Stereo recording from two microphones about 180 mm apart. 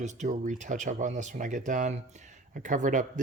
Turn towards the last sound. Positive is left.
turn(degrees=-45)  # may be behind; listen again after turning